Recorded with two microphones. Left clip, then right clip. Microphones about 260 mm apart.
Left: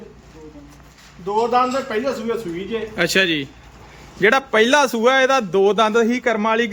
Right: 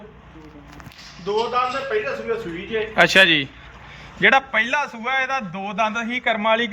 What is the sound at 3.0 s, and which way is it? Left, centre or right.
A man's voice, centre.